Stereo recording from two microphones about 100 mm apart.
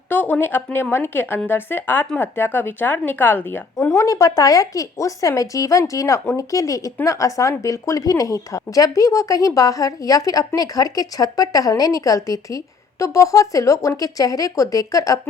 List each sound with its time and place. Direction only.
0.1 s a woman's voice: 20° left (ahead or behind)
3.8 s speech: 30° left (ahead or behind)